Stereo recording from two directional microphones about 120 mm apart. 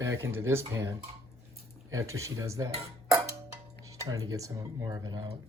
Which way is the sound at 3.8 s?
30° right (ahead or behind).